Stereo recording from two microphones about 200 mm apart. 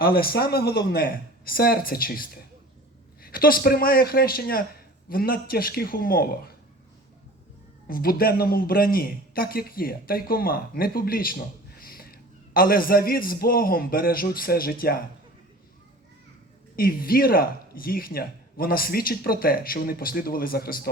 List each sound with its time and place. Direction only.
0.0 s speech: 50° left (ahead or behind)
7.9 s speech: 45° left (ahead or behind)
16.7 s speech: 45° left (ahead or behind)